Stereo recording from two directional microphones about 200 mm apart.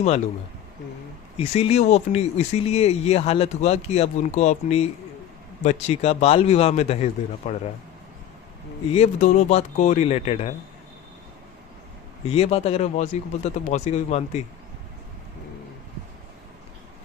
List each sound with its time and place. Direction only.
1.4 s speech: 30° left (ahead or behind)
8.9 s speech: 30° left (ahead or behind)
12.3 s speech: 30° left (ahead or behind)